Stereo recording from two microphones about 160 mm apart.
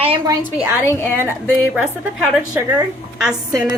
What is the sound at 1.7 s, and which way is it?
A woman's voice, 5° right (ahead or behind).